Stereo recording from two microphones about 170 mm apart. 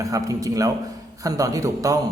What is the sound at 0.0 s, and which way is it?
Speech, 20° right (ahead or behind).